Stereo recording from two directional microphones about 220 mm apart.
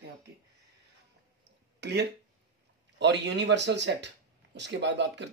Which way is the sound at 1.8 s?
50° right (ahead or behind).